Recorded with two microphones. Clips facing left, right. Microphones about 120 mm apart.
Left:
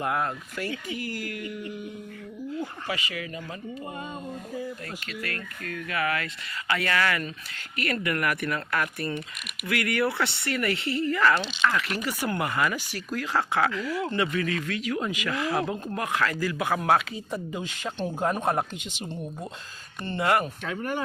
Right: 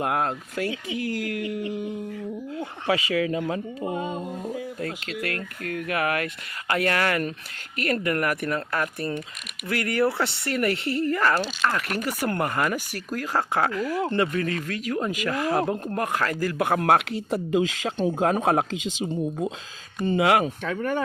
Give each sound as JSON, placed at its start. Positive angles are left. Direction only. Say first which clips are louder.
{"t": 0.0, "sound": "speech", "louder": "right 3 dB", "side_deg": -75}
{"t": 0.9, "sound": "speech", "louder": "right 6 dB", "side_deg": -90}
{"t": 4.8, "sound": "speech", "louder": "right 6 dB", "side_deg": -80}
{"t": 20.1, "sound": "speech", "louder": "right 4 dB", "side_deg": -90}